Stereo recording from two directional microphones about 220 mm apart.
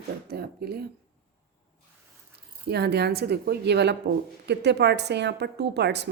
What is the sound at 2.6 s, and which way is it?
A woman's voice, 50° right (ahead or behind).